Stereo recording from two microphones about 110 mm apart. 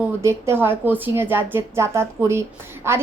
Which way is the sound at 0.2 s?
25° right (ahead or behind).